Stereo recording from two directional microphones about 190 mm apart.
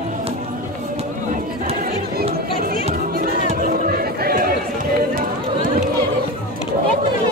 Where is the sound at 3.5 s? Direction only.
45° right (ahead or behind).